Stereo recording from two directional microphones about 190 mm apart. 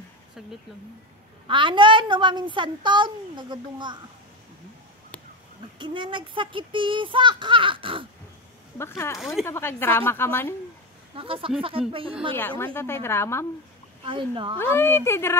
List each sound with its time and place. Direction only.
1.5 s a woman's voice: 25° right (ahead or behind)
5.8 s a woman's voice: 25° right (ahead or behind)
8.7 s a woman's voice: 15° left (ahead or behind)
9.2 s speech: centre (ahead or behind)
9.5 s a woman's voice: 10° left (ahead or behind)
11.1 s a woman's voice: 30° right (ahead or behind)
12.4 s a woman's voice: 10° left (ahead or behind)
14.0 s a woman's voice: 25° right (ahead or behind)
14.6 s a woman's voice: 10° left (ahead or behind)